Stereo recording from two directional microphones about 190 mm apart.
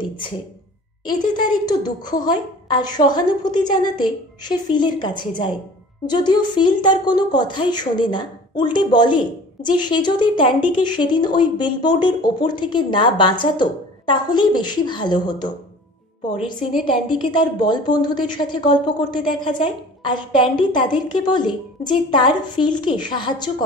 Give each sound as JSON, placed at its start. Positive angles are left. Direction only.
{"t": 1.3, "sound": "speech", "side_deg": 20}
{"t": 17.3, "sound": "speech", "side_deg": 25}